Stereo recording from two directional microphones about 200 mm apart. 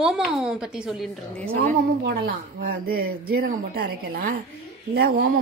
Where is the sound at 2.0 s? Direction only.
55° right (ahead or behind).